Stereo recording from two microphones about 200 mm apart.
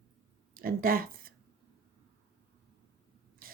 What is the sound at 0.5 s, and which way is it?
Speech, 45° right (ahead or behind).